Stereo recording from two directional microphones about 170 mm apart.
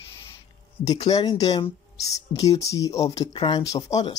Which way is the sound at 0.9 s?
20° left (ahead or behind).